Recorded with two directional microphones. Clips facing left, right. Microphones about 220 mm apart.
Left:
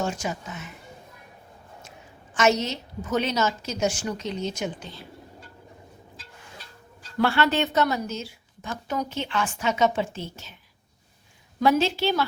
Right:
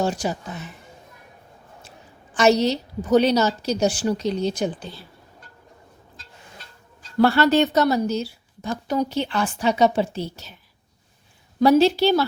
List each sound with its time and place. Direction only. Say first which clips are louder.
0.0 s a woman's voice: right 5 dB; 35° right (ahead or behind)
2.3 s a woman's voice: right 5 dB; 35° right (ahead or behind)
7.2 s a woman's voice: right 6 dB; 40° right (ahead or behind)
11.6 s a woman's voice: right 6 dB; 35° right (ahead or behind)